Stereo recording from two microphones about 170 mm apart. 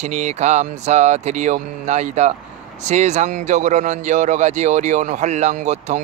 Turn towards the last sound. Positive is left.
turn(degrees=-45)  # may be behind; listen again after turning